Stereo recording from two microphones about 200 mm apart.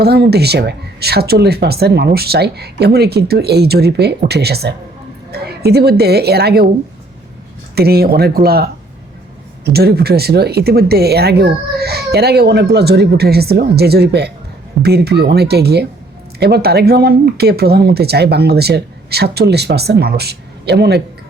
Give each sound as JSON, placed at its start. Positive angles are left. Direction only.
{"t": 0.0, "sound": "a woman's voice", "side_deg": -55}
{"t": 7.8, "sound": "speech", "side_deg": -50}
{"t": 9.7, "sound": "speech", "side_deg": -50}